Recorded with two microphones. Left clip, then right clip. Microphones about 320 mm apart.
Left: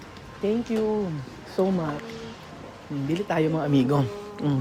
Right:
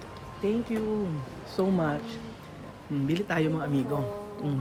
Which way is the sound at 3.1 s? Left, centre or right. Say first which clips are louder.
Left 4 dB; centre.